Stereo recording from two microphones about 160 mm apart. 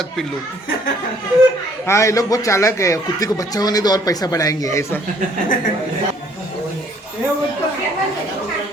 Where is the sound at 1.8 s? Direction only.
20° left (ahead or behind).